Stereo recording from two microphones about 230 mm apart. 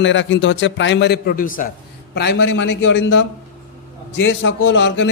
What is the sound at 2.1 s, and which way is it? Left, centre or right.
A man's voice, left.